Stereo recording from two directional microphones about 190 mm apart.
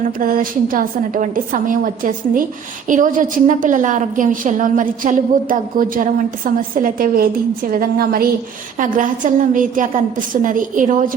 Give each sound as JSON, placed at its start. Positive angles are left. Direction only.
{"t": 0.2, "sound": "a woman's voice", "side_deg": -45}